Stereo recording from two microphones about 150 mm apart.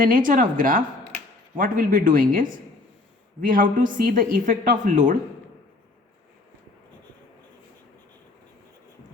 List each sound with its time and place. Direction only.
0.0 s a woman's voice: 65° right (ahead or behind)